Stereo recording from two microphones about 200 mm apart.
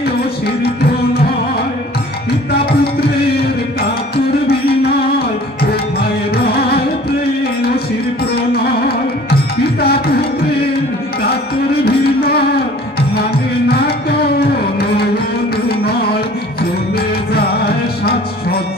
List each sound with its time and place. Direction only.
2.5 s music: 50° left (ahead or behind)
6.3 s music: 50° left (ahead or behind)
8.6 s music: 50° left (ahead or behind)
11.8 s music: 50° left (ahead or behind)
13.7 s music: 50° left (ahead or behind)
15.8 s carnatic music: 50° left (ahead or behind)
17.3 s music: 50° left (ahead or behind)